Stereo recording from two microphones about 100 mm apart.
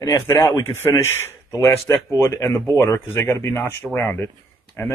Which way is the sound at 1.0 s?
25° left (ahead or behind).